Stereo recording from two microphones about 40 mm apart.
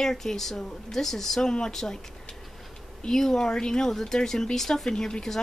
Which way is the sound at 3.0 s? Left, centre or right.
Centre.